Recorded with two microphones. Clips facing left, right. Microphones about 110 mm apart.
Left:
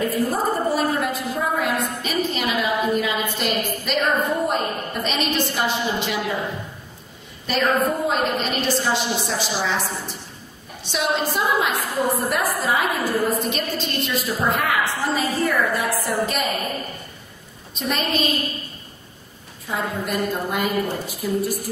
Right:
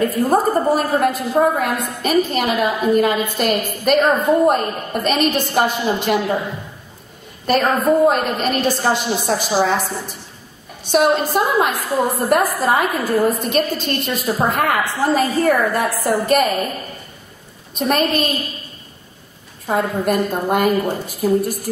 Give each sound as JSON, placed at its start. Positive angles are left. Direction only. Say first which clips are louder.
{"t": 0.0, "sound": "a woman's voice", "louder": "right 6 dB", "side_deg": -50}
{"t": 7.4, "sound": "a woman's voice", "louder": "right 5 dB", "side_deg": -50}
{"t": 17.7, "sound": "a woman's voice", "louder": "right 6 dB", "side_deg": -50}
{"t": 19.6, "sound": "a woman's voice", "louder": "right 7 dB", "side_deg": -50}